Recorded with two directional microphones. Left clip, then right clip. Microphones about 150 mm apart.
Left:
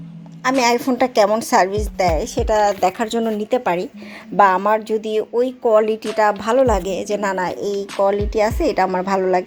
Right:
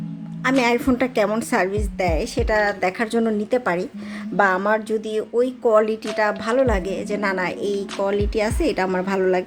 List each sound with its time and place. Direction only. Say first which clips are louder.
0.4 s a woman's voice: left 2 dB; 5° right (ahead or behind)